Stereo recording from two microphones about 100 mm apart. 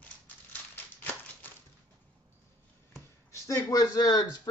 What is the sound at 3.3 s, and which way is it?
Speech, 35° left (ahead or behind).